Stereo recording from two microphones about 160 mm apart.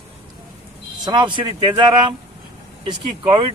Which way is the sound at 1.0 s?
30° right (ahead or behind).